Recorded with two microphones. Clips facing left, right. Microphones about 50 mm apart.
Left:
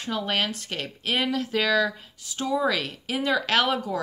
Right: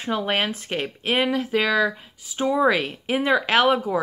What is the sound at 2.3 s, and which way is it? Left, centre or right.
Speech, right.